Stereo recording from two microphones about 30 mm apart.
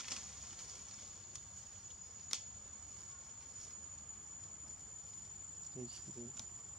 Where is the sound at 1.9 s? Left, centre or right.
Centre.